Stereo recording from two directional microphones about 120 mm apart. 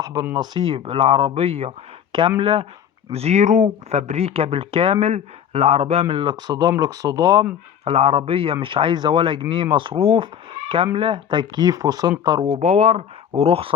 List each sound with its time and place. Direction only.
0.0 s speech: 30° right (ahead or behind)
0.3 s speech: 45° right (ahead or behind)
7.9 s speech: 55° right (ahead or behind); by 12.1 s 35° right (ahead or behind)
12.5 s speech: 65° right (ahead or behind)